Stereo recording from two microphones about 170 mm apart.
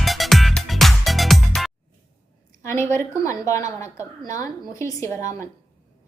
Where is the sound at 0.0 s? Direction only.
Centre (ahead or behind).